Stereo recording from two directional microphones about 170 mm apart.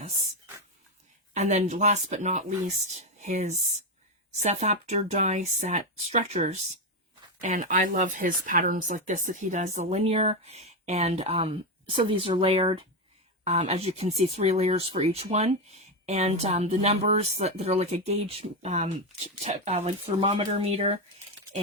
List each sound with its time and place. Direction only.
1.3 s speech: 45° right (ahead or behind)